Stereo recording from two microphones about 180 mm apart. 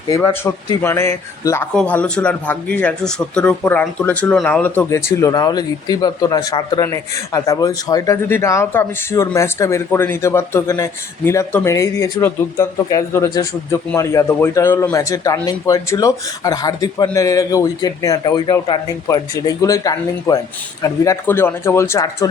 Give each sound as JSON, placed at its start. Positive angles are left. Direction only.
{"t": 0.1, "sound": "a man's voice", "side_deg": 15}